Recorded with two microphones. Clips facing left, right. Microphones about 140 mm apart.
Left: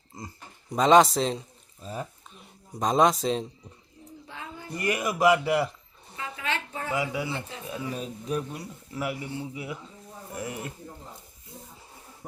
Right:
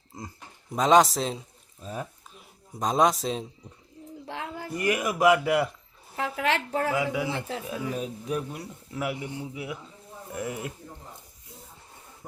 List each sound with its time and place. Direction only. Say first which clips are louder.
0.1 s speech: right 1 dB; centre (ahead or behind)
4.3 s a sound: right 6 dB; 90° right
4.7 s a man's voice: right 1 dB; centre (ahead or behind)
6.1 s speech: right 6 dB; 85° right
6.9 s speech: right 2 dB; centre (ahead or behind)
9.1 s a man's voice: even; 15° right (ahead or behind)
10.3 s speech: right 2 dB; centre (ahead or behind)